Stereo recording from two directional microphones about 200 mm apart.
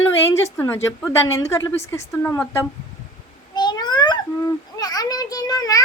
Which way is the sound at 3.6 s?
20° left (ahead or behind).